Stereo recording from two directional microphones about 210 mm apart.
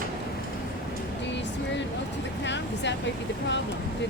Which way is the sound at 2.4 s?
60° left (ahead or behind).